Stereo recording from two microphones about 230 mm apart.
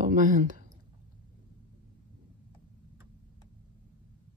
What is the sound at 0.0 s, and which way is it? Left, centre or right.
Speech, right.